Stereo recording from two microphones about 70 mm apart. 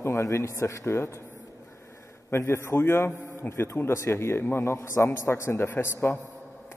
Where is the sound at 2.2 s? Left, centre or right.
Left.